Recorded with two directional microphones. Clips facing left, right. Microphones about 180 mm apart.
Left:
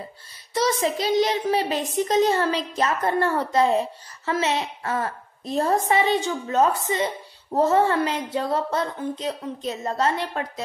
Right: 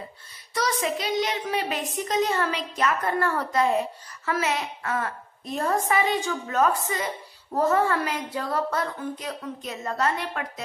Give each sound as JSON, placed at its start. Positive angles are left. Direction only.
{"t": 0.6, "sound": "a child's voice", "side_deg": 25}